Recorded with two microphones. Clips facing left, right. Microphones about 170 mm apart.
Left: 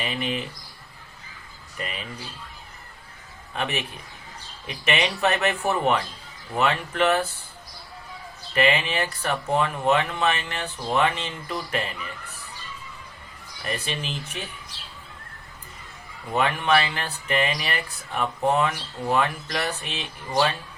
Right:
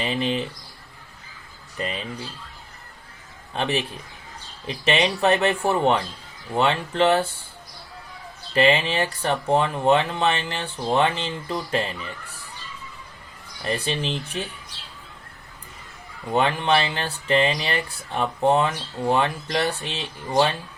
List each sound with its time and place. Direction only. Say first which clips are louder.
0.0 s speech: right 4 dB; 30° right (ahead or behind)
1.8 s speech: right 5 dB; 30° right (ahead or behind)
3.5 s speech: right 4 dB; 30° right (ahead or behind)
8.5 s speech: right 3 dB; 30° right (ahead or behind)
13.7 s speech: right 5 dB; 30° right (ahead or behind)
16.3 s speech: right 1 dB; 30° right (ahead or behind)